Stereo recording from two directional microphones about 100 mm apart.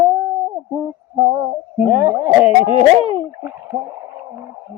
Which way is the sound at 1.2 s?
50° right (ahead or behind).